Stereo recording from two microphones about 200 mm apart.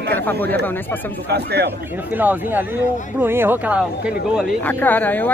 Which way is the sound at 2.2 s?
10° right (ahead or behind).